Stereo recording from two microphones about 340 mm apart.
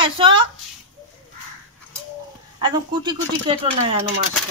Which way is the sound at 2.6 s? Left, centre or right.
Centre.